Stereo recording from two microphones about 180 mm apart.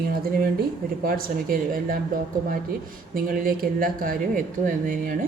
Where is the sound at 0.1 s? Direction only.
55° right (ahead or behind).